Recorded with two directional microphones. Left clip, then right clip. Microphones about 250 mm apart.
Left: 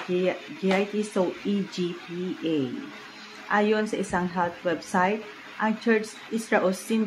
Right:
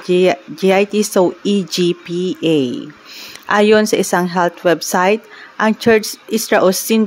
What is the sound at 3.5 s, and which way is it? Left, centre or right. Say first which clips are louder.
A woman's voice: right 12 dB; right.